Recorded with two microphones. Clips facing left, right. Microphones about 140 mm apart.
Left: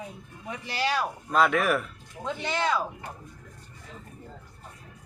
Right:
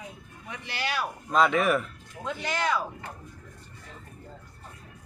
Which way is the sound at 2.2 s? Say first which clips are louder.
Left 1 dB; 20° left (ahead or behind).